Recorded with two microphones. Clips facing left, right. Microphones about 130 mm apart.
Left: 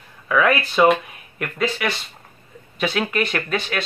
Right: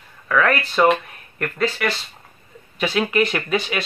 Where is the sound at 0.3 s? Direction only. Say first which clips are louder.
Left 1 dB; 5° left (ahead or behind).